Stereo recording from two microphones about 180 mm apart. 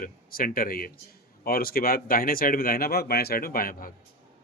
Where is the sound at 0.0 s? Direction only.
50° left (ahead or behind).